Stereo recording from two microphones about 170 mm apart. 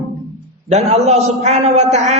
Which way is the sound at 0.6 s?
40° right (ahead or behind).